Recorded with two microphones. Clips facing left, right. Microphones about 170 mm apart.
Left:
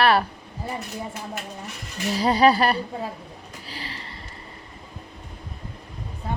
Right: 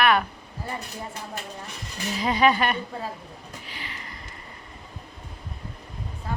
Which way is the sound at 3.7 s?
35° left (ahead or behind).